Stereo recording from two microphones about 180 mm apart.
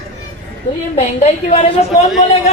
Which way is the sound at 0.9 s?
35° left (ahead or behind).